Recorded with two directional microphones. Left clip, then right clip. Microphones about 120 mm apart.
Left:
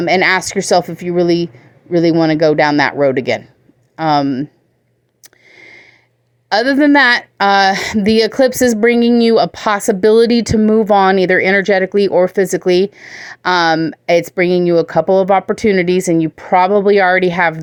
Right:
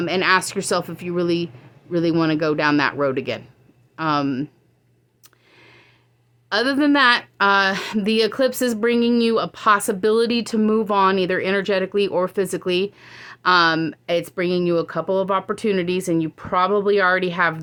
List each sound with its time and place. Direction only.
0.0 s speech: 45° left (ahead or behind)
5.2 s a sound: 45° left (ahead or behind)
6.5 s speech: 45° left (ahead or behind)